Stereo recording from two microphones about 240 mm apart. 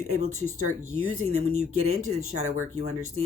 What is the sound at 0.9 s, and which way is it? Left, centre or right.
Speech, right.